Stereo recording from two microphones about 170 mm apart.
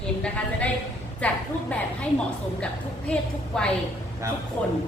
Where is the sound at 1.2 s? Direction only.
5° left (ahead or behind).